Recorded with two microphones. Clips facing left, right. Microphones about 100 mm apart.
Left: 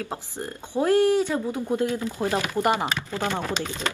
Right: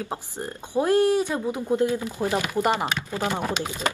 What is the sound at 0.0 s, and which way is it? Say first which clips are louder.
Speech: right 1 dB; 20° right (ahead or behind).